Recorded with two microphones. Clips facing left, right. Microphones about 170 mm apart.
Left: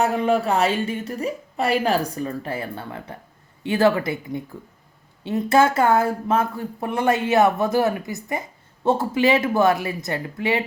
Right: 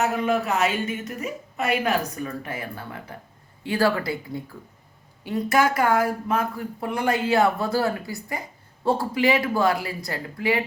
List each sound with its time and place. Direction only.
0.0 s a woman's voice: 30° left (ahead or behind)